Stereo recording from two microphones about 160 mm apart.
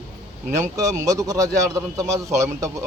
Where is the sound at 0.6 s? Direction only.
20° right (ahead or behind).